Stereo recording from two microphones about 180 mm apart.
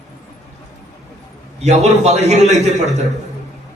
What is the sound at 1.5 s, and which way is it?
A man's voice, 35° right (ahead or behind).